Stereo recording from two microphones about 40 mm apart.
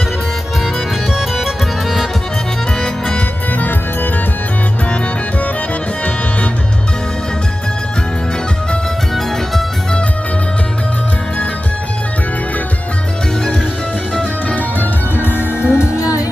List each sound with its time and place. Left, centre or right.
1.4 s music: centre
2.8 s music: centre
3.6 s music: left
14.8 s music: left